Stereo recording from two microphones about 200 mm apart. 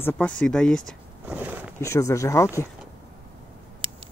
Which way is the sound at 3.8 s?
25° right (ahead or behind).